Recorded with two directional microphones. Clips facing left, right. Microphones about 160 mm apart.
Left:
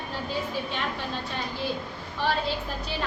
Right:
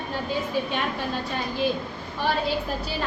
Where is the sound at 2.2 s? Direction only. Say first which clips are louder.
Right 2 dB; 10° right (ahead or behind).